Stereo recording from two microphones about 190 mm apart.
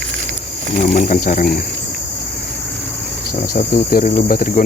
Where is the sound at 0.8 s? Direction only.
40° left (ahead or behind).